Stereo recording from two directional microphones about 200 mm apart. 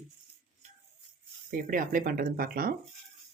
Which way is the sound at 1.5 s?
45° right (ahead or behind).